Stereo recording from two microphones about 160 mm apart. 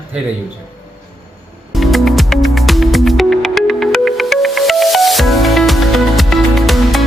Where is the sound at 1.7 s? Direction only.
Centre (ahead or behind).